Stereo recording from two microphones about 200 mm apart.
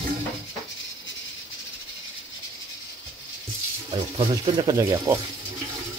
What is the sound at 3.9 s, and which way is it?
Speech, 25° right (ahead or behind).